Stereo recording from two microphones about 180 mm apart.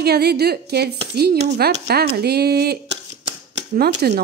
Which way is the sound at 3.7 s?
55° right (ahead or behind).